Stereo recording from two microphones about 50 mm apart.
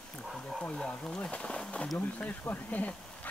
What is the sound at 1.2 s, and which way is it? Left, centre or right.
Speech, left.